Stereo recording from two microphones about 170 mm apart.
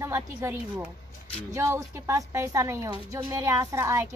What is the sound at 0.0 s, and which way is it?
A woman's voice, 15° right (ahead or behind).